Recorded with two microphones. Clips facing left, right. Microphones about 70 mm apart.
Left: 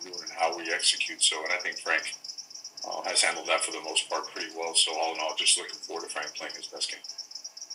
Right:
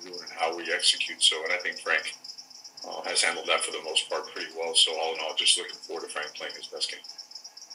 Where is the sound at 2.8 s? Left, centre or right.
Centre.